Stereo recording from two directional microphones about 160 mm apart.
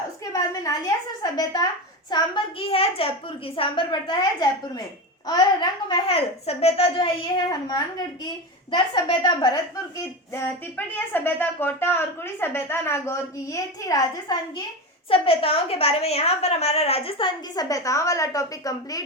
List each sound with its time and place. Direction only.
0.3 s a woman's voice: 20° left (ahead or behind)
15.1 s a woman's voice: 35° left (ahead or behind)